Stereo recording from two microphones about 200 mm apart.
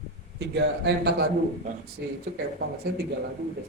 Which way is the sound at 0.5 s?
55° right (ahead or behind).